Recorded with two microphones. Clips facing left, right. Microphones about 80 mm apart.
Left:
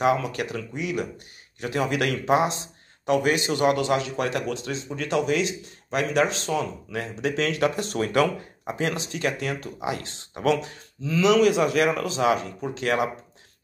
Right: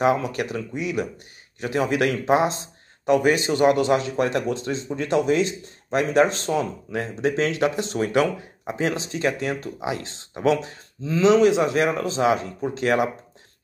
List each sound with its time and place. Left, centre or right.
0.5 s speech: right